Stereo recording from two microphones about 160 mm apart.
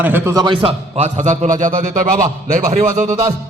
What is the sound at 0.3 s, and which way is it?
Speech, 30° right (ahead or behind).